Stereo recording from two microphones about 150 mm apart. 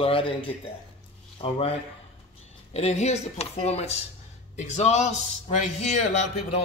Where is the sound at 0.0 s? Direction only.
35° left (ahead or behind).